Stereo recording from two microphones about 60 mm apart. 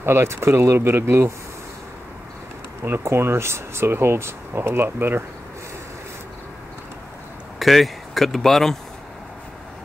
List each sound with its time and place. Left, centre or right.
0.0 s speech: right
3.0 s speech: right
7.5 s speech: centre